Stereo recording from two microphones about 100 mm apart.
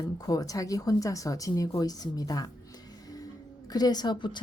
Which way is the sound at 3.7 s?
45° left (ahead or behind).